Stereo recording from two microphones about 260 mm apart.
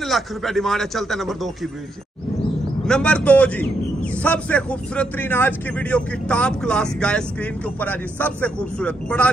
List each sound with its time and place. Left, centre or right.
0.0 s a man's voice: centre
2.9 s a man's voice: centre